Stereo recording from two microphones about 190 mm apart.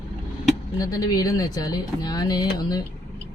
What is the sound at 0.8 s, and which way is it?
Speech, 20° left (ahead or behind).